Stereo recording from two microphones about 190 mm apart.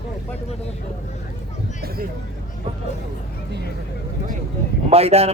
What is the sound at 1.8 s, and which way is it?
Speech, 50° right (ahead or behind).